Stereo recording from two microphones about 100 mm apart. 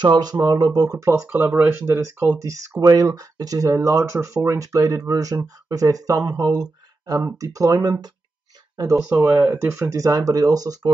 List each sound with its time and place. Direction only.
0.0 s speech: 45° right (ahead or behind)
1.3 s speech: 20° right (ahead or behind)
9.0 s speech: 20° right (ahead or behind); by 10.9 s 40° right (ahead or behind)